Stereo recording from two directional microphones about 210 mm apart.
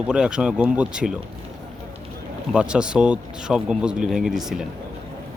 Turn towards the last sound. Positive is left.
turn(degrees=0)  # may be behind; listen again after turning